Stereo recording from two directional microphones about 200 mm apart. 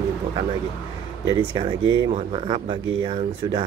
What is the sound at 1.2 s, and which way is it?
Speech, 20° right (ahead or behind).